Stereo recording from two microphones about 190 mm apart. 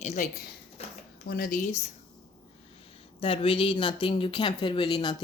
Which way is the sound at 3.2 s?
30° left (ahead or behind).